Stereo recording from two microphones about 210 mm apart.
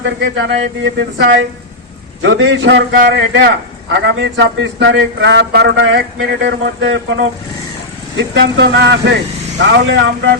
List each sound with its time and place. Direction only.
0.2 s speech: 60° right (ahead or behind)